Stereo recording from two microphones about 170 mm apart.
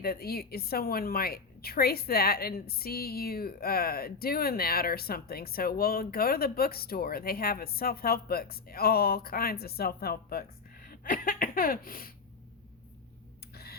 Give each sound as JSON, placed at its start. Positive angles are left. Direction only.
{"t": 0.0, "sound": "a woman's voice", "side_deg": 65}
{"t": 13.5, "sound": "tick", "side_deg": 65}